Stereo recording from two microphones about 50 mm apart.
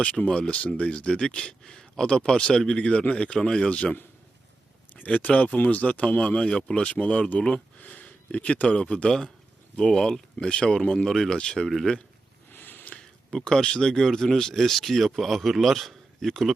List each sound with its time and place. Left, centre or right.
0.0 s speech: left
4.9 s speech: left; by 11.7 s centre
12.5 s a sound: left
12.9 s speech: centre